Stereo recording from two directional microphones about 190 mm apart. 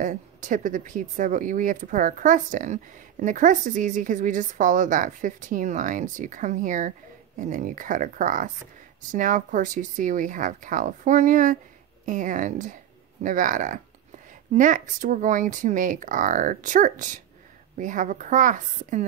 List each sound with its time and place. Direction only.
0.0 s a woman's voice: 40° right (ahead or behind)